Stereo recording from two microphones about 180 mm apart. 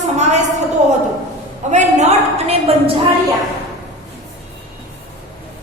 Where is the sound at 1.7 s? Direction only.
40° right (ahead or behind).